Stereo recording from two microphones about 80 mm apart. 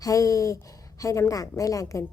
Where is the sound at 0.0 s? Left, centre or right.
Left.